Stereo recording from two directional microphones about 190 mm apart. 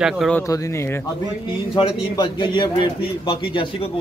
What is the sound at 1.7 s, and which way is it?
A man's voice, 25° left (ahead or behind).